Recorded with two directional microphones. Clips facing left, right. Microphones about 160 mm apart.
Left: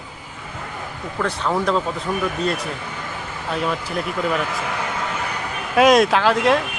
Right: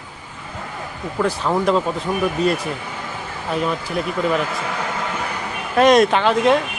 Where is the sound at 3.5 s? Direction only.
Centre (ahead or behind).